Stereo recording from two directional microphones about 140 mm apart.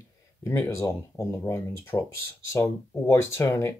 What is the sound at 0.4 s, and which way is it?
Speech, 20° left (ahead or behind).